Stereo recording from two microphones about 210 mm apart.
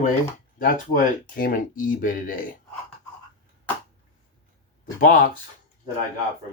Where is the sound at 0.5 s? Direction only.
40° left (ahead or behind).